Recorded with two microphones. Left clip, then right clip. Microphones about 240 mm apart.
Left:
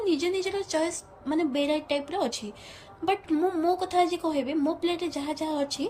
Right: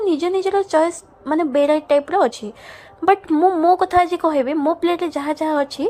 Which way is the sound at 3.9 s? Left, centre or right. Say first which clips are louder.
Right 9 dB; centre.